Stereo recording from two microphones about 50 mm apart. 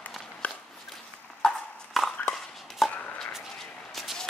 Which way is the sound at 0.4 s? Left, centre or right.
Left.